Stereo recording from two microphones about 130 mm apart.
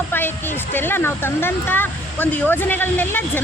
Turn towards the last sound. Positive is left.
turn(degrees=15)  # may be behind; listen again after turning